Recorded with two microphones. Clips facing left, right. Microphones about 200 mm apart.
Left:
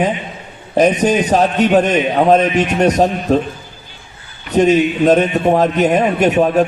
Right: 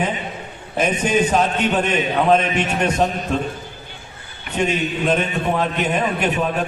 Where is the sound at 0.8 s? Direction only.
40° left (ahead or behind).